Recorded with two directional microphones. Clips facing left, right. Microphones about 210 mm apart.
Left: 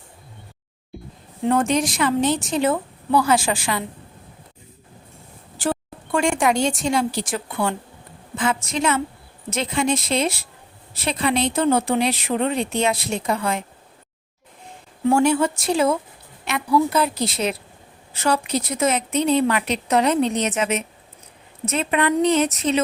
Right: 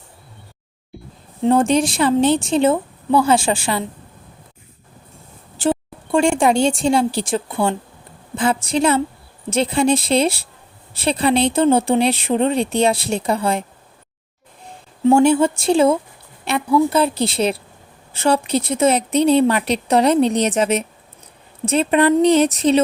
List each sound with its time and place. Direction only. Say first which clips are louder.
1.4 s a woman's voice: right 4 dB; 30° right (ahead or behind)
5.5 s speech: right 5 dB; 25° right (ahead or behind)
15.0 s a woman's voice: right 5 dB; 25° right (ahead or behind)